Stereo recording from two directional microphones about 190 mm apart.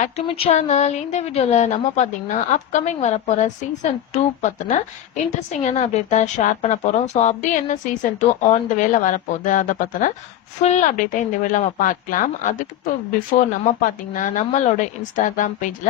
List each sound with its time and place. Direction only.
0.0 s a woman's voice: 35° left (ahead or behind)